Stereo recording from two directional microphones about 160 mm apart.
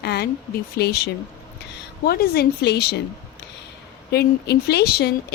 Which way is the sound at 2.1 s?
75° left (ahead or behind).